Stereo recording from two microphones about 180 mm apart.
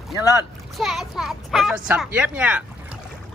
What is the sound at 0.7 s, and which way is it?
A child's voice, centre (ahead or behind).